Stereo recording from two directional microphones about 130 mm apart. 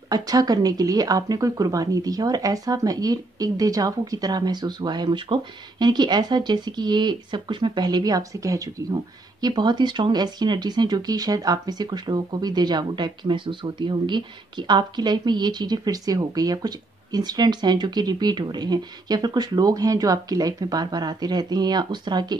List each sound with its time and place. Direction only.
0.1 s speech: 30° right (ahead or behind)